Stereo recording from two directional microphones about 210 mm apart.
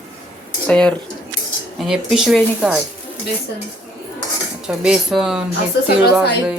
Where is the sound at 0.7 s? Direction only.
5° left (ahead or behind).